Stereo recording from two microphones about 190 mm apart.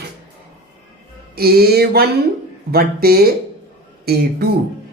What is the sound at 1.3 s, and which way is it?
Speech, 55° right (ahead or behind).